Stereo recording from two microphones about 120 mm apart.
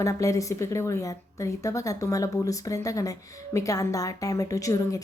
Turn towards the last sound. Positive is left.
turn(degrees=25)  # may be behind; listen again after turning